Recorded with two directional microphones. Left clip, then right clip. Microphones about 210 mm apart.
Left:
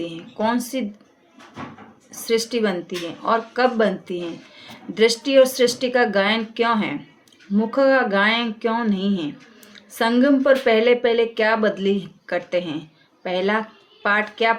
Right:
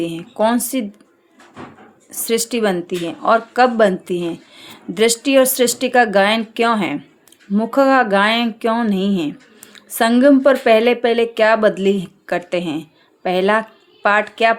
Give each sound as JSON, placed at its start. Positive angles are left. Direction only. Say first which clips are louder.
{"t": 0.0, "sound": "speech", "louder": "right 6 dB", "side_deg": -50}
{"t": 2.2, "sound": "speech", "louder": "right 3 dB", "side_deg": -50}